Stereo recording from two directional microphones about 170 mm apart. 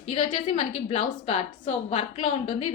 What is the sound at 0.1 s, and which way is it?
A woman's voice, 35° left (ahead or behind).